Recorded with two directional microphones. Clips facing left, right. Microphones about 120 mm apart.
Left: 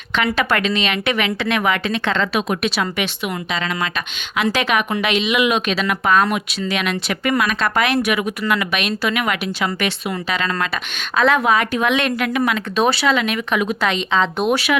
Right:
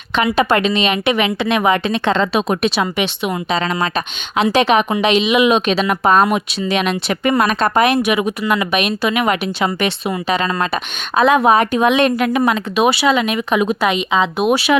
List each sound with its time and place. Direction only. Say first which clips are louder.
0.2 s speech: right 4 dB; 20° right (ahead or behind)
4.5 s speech: right 6 dB; 25° right (ahead or behind)
7.9 s speech: right 3 dB; 20° right (ahead or behind)
12.7 s speech: right 2 dB; 15° right (ahead or behind)